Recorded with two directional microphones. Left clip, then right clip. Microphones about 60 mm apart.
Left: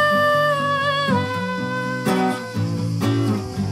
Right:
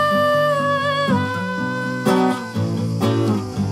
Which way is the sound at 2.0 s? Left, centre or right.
Right.